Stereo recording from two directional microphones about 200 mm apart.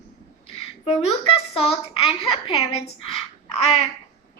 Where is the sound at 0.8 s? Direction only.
30° left (ahead or behind).